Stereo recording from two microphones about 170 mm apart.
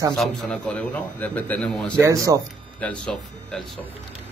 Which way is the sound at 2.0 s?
20° right (ahead or behind).